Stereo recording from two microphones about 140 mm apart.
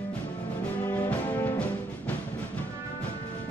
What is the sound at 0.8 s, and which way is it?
Music, 15° left (ahead or behind).